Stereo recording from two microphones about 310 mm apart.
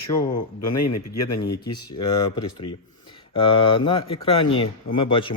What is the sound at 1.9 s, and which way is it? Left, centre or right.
Speech, centre.